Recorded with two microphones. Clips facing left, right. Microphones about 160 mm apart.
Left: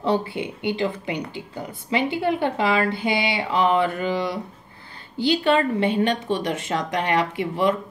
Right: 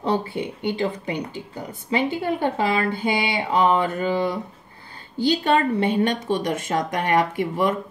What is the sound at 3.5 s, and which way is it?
Speech, 45° right (ahead or behind).